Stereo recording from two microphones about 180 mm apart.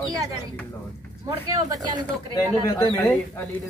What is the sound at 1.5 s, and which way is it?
Speech, 20° right (ahead or behind).